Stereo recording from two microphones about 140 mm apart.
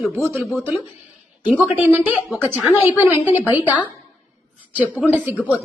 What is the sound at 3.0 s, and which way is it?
Speech, 10° right (ahead or behind).